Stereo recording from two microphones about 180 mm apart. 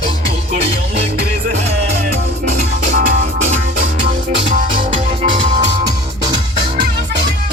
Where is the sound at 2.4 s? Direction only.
50° right (ahead or behind).